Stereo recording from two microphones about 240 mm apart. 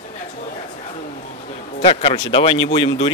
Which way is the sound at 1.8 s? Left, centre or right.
Left.